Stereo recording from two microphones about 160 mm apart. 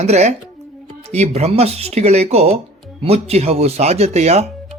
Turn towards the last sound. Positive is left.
turn(degrees=-40)  # may be behind; listen again after turning